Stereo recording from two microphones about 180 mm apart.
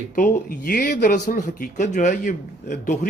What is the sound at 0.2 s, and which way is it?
Speech, 50° left (ahead or behind).